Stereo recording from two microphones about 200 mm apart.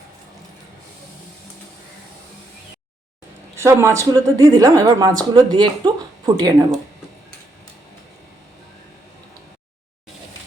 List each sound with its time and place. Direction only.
3.5 s a woman's voice: 15° right (ahead or behind)